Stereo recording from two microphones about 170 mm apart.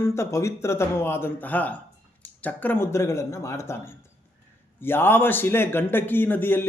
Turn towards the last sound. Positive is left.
turn(degrees=10)  # may be behind; listen again after turning